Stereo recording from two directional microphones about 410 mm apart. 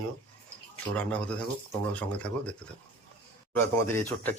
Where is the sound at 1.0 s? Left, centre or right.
Centre.